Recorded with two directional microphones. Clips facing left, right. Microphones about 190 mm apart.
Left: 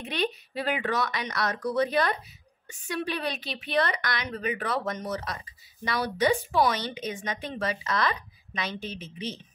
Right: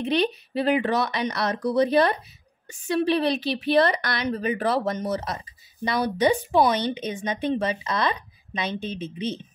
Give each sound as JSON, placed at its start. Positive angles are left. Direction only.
{"t": 0.6, "sound": "speech", "side_deg": -30}